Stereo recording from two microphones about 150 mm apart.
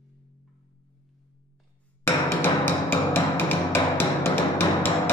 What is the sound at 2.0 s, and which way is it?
Music, 15° left (ahead or behind).